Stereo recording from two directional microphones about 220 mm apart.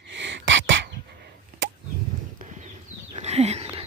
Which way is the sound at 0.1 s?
55° right (ahead or behind).